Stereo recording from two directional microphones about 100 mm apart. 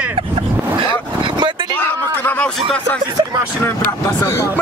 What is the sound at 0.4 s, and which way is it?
Vehicle, 55° right (ahead or behind).